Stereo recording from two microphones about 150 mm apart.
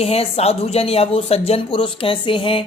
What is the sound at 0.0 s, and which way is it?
A woman's voice, 40° left (ahead or behind).